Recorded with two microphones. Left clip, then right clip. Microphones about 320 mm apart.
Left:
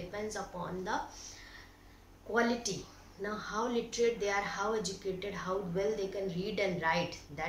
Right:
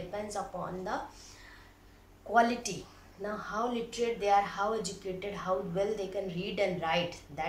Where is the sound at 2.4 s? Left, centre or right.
Centre.